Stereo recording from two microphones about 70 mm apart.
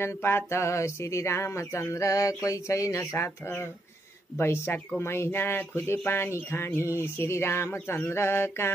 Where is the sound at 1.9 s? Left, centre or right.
Left.